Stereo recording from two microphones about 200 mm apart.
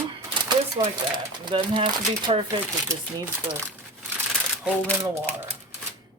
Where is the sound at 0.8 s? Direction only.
20° right (ahead or behind).